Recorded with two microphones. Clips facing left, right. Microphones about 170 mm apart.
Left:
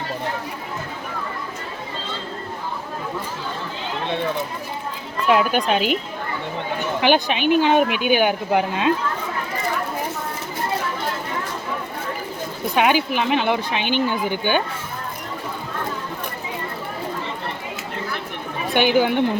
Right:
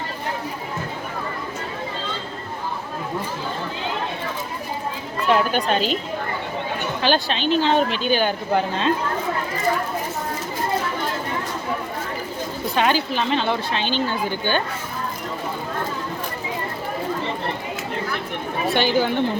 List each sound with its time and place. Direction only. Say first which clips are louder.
5.3 s speech: left 1 dB; 10° left (ahead or behind)
7.0 s speech: left 3 dB; 15° left (ahead or behind)
12.7 s speech: left 2 dB; 15° left (ahead or behind)
18.7 s speech: left 3 dB; 15° left (ahead or behind)